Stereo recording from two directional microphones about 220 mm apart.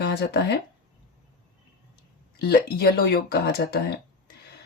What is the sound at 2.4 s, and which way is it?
Speech, 45° left (ahead or behind).